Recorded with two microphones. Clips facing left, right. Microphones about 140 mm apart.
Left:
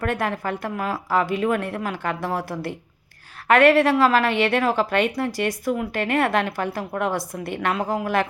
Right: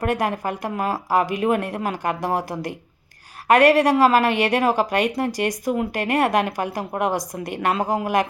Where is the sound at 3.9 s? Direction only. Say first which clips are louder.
Right 2 dB; 40° right (ahead or behind).